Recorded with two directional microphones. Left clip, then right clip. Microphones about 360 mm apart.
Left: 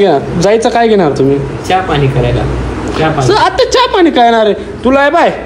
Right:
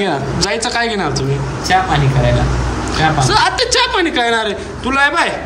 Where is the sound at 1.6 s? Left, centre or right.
Right.